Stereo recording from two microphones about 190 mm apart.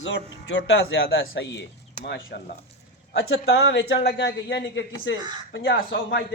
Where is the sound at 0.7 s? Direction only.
75° left (ahead or behind).